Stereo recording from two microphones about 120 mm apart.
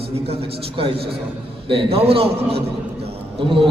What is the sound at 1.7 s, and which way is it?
A man's voice, 50° right (ahead or behind).